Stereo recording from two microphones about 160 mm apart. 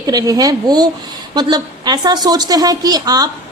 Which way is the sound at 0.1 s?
25° right (ahead or behind).